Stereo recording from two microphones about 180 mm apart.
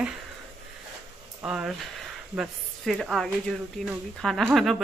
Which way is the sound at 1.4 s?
5° right (ahead or behind).